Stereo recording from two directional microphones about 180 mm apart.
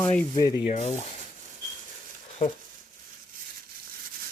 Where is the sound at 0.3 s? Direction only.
20° left (ahead or behind).